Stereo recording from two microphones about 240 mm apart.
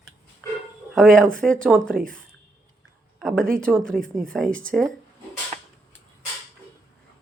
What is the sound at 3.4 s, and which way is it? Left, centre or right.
Speech, right.